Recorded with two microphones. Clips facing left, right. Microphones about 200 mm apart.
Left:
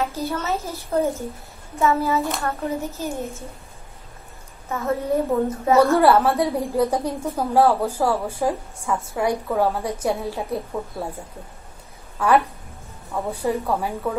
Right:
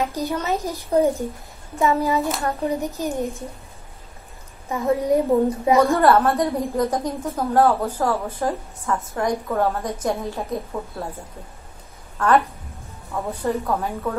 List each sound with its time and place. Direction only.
0.0 s a woman's voice: 15° right (ahead or behind)
4.6 s a woman's voice: 15° right (ahead or behind)
5.9 s a woman's voice: 10° left (ahead or behind)